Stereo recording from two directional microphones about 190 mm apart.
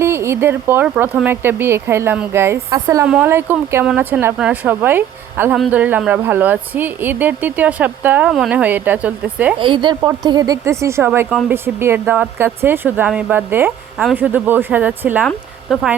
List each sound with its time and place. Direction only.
0.0 s speech: 15° right (ahead or behind)
9.6 s a woman's voice: 25° right (ahead or behind); by 16.0 s centre (ahead or behind)